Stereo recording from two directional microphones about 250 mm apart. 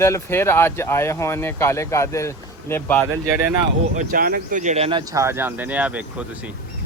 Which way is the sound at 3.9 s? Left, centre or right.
Right.